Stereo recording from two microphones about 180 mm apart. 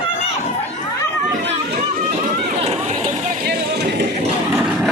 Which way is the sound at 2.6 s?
35° right (ahead or behind).